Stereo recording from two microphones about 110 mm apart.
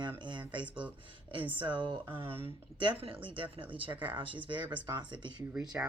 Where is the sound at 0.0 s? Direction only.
45° right (ahead or behind).